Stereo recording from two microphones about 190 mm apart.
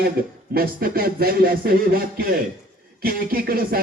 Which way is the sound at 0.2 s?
50° right (ahead or behind).